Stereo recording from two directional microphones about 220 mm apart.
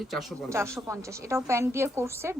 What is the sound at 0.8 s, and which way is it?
Speech, 15° right (ahead or behind).